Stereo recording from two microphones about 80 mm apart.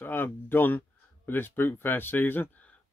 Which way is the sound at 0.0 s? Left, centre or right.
Left.